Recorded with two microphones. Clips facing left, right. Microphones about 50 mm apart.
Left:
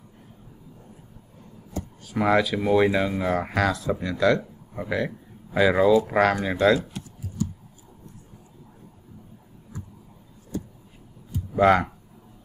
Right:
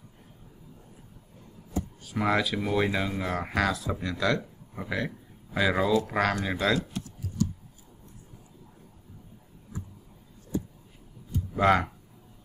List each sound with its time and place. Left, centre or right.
2.1 s speech: centre
7.4 s a sound: centre
11.5 s speech: centre